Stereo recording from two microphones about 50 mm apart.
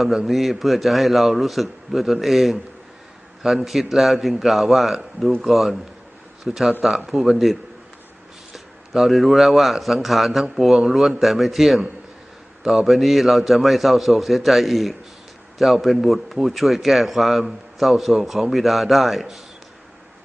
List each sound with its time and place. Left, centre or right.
0.3 s a man's voice: centre